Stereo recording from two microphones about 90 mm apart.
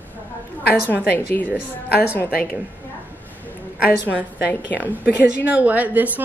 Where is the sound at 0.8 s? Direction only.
20° left (ahead or behind).